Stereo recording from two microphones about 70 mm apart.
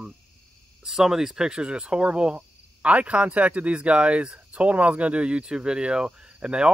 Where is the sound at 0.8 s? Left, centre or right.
Centre.